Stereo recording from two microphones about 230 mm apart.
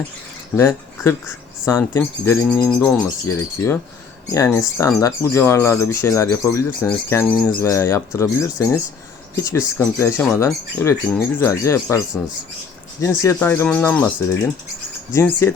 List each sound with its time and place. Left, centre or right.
0.5 s speech: centre
13.0 s speech: centre
15.1 s speech: centre